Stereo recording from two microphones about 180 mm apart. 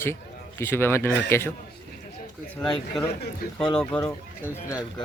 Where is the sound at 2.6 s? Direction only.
Centre (ahead or behind).